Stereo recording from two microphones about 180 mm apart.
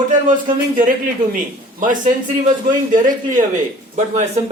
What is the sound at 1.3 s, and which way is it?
A man's voice, 45° right (ahead or behind).